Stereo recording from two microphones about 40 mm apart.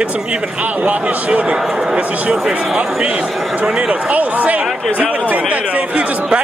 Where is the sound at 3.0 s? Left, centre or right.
Right.